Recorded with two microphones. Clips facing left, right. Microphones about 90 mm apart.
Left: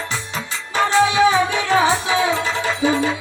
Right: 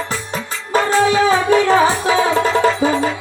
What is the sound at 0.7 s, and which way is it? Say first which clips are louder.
Music: right 2 dB; 45° right (ahead or behind).